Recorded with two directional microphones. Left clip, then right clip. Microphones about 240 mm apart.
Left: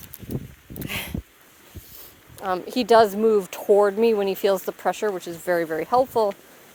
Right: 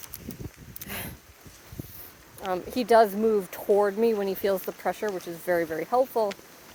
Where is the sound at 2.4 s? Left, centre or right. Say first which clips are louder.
Left 4 dB; left.